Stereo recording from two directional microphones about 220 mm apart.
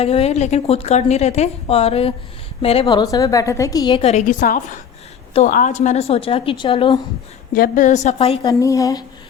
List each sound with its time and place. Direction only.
0.0 s a woman's voice: 25° left (ahead or behind)
7.5 s a woman's voice: 40° left (ahead or behind)
8.5 s speech: 15° left (ahead or behind)